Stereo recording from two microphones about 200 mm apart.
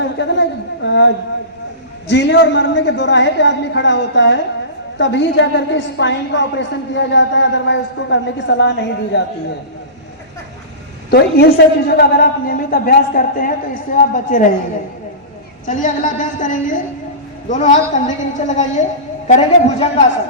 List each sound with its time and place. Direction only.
0.0 s a sound: 60° left (ahead or behind)
0.9 s a woman's voice: 60° left (ahead or behind)
11.1 s a man's voice: 55° left (ahead or behind)
15.6 s a woman's voice: 40° left (ahead or behind)